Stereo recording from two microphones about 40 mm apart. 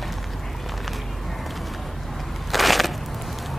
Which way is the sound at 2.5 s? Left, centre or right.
Centre.